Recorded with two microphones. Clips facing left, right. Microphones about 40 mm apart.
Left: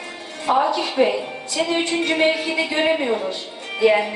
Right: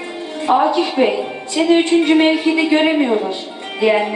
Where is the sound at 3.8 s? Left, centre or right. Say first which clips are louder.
Right 2 dB; right.